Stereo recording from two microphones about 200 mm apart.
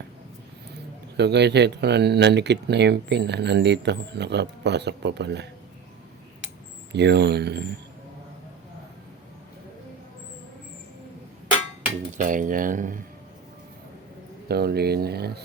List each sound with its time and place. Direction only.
1.1 s speech: 55° right (ahead or behind)
6.9 s speech: 55° right (ahead or behind)
12.1 s speech: 40° right (ahead or behind)
14.4 s speech: 50° right (ahead or behind)